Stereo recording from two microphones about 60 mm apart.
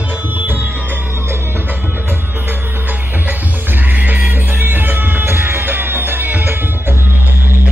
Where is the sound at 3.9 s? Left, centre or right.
Right.